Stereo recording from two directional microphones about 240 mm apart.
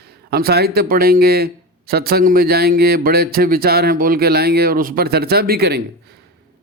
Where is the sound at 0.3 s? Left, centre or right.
Right.